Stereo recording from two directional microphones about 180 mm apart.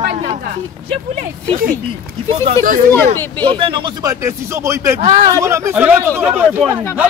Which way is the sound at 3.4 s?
30° right (ahead or behind).